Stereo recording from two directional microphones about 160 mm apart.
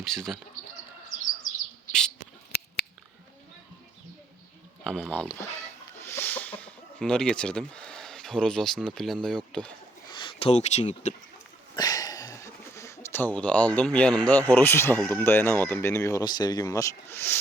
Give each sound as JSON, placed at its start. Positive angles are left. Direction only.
{"t": 0.0, "sound": "speech", "side_deg": 5}
{"t": 4.8, "sound": "speech", "side_deg": 5}
{"t": 10.1, "sound": "speech", "side_deg": 30}
{"t": 11.8, "sound": "speech", "side_deg": 25}